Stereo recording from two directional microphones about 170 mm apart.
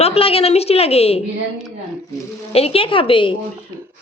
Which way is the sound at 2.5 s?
35° left (ahead or behind).